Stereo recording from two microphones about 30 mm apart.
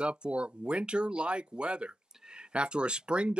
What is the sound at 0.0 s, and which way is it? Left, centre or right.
Speech, right.